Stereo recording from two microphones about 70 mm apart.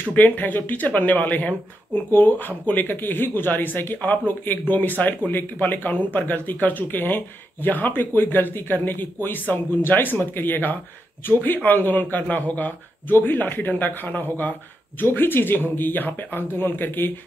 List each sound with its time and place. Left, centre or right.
0.1 s speech: left